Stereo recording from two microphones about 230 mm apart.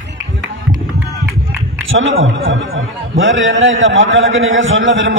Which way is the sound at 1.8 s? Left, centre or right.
Right.